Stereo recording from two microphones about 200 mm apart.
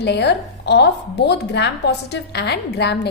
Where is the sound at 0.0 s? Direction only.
55° left (ahead or behind).